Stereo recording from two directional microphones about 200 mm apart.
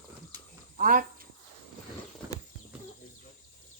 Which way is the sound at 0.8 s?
45° right (ahead or behind).